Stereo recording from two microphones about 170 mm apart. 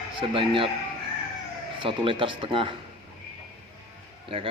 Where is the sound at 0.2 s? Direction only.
30° right (ahead or behind).